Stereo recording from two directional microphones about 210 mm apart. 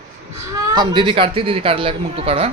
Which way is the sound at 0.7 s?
20° right (ahead or behind).